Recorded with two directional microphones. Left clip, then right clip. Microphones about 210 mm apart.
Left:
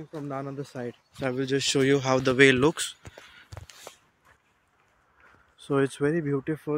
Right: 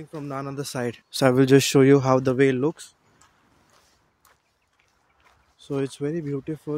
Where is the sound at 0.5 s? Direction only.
50° right (ahead or behind).